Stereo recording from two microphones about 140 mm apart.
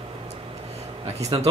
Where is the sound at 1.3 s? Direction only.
40° right (ahead or behind).